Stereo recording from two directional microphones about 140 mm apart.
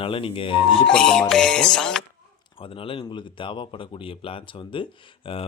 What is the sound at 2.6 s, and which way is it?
Speech, 40° left (ahead or behind).